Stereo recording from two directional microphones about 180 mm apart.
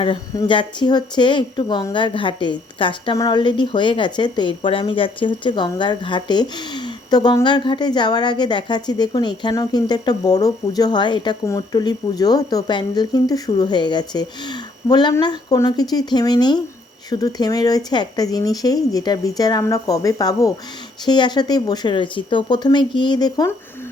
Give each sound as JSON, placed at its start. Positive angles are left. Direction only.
{"t": 0.0, "sound": "speech", "side_deg": 30}